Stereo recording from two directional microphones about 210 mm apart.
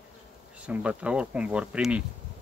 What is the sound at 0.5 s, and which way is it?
Speech, 5° right (ahead or behind).